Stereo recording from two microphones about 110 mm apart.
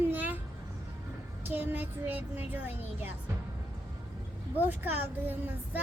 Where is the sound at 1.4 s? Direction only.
15° right (ahead or behind).